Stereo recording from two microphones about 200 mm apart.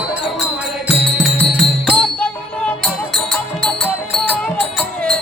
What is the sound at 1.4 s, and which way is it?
Music, 5° left (ahead or behind).